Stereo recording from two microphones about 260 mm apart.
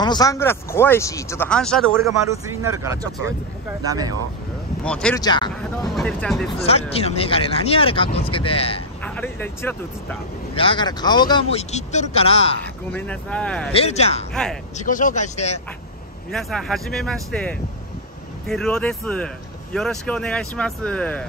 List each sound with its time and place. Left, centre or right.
0.0 s speech: centre
2.8 s speech: centre
4.8 s speech: centre
5.2 s speech: centre
5.9 s speech: centre
6.6 s speech: left
9.0 s speech: centre
10.5 s speech: centre
12.9 s speech: centre
13.7 s speech: left
14.3 s speech: centre
14.8 s speech: left
16.3 s speech: centre